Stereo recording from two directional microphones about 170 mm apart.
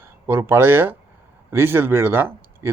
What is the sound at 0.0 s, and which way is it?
A man's voice, 15° right (ahead or behind).